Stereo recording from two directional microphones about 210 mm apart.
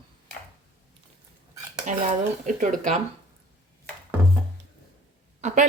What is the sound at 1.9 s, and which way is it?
Speech, 40° right (ahead or behind).